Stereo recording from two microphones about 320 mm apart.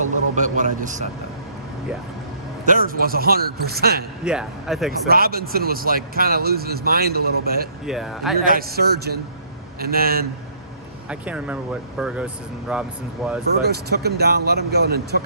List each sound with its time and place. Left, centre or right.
0.0 s a man's voice: right
2.6 s speech: right
4.2 s speech: centre
4.9 s speech: right
7.9 s speech: centre
8.4 s speech: right
11.1 s speech: centre
13.6 s speech: right